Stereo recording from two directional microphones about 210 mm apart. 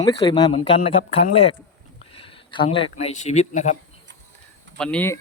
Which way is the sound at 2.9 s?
35° left (ahead or behind).